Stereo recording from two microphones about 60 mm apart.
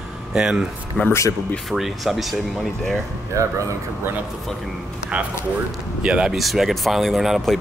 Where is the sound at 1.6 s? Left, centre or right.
Centre.